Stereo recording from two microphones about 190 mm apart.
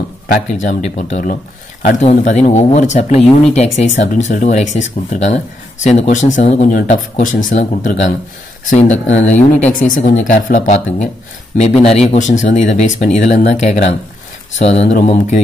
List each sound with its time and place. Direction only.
0.5 s speech: 40° left (ahead or behind)